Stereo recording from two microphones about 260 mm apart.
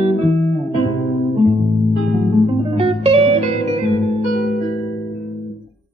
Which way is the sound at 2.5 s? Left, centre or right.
Centre.